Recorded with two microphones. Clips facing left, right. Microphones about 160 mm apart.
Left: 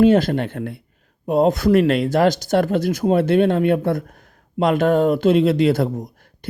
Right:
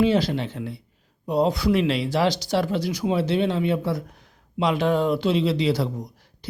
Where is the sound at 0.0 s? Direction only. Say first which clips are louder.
Left 6 dB; 50° left (ahead or behind).